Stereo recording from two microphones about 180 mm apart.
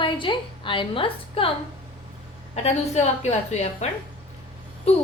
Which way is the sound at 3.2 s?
40° left (ahead or behind).